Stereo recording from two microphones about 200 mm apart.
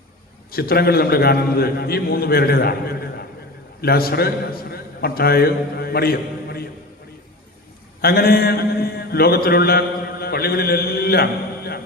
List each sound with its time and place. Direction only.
0.5 s a man's voice: 50° left (ahead or behind)
8.0 s mantra: 50° left (ahead or behind)